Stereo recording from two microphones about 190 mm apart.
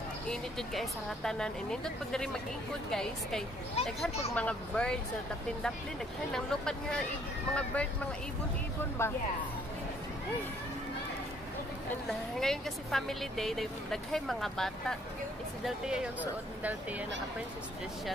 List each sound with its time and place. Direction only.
0.3 s speech: centre (ahead or behind)
6.3 s speech: 5° left (ahead or behind)
9.0 s speech: 15° left (ahead or behind)
12.1 s speech: centre (ahead or behind)